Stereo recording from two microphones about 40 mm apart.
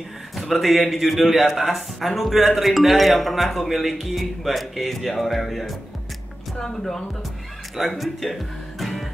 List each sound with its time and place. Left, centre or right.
0.4 s speech: centre
6.6 s speech: centre
8.0 s speech: centre